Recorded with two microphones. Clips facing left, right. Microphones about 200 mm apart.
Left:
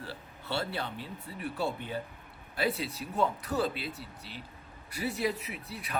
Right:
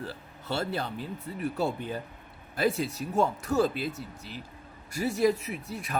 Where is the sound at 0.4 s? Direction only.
45° right (ahead or behind).